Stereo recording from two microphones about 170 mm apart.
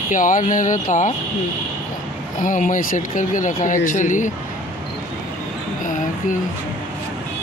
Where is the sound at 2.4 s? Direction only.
50° left (ahead or behind).